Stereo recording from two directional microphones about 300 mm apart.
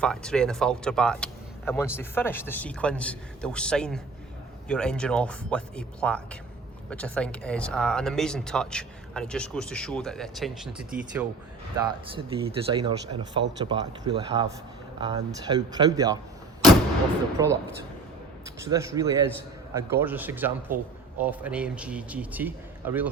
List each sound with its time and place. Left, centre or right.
0.0 s speech: centre
11.8 s speech: centre
17.4 s speech: centre
18.7 s speech: centre